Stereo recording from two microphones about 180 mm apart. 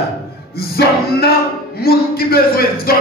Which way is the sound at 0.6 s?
60° left (ahead or behind).